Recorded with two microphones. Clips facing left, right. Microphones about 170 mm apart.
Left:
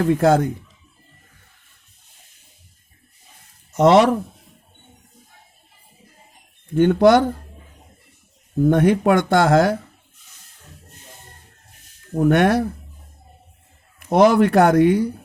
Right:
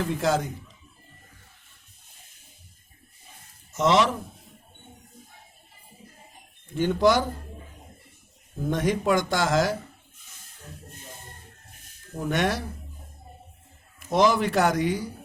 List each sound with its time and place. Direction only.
0.0 s speech: 55° left (ahead or behind)
3.8 s speech: 60° left (ahead or behind)
6.7 s speech: 60° left (ahead or behind)
8.7 s speech: 60° left (ahead or behind)
12.1 s speech: 60° left (ahead or behind)
14.1 s speech: 60° left (ahead or behind)